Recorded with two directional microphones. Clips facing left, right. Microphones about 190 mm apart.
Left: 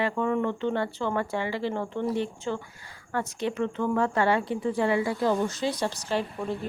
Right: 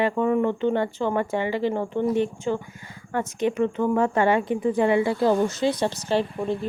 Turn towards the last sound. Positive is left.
turn(degrees=-25)  # may be behind; listen again after turning